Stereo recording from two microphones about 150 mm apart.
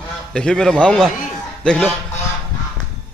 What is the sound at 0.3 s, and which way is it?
A man's voice, 5° left (ahead or behind).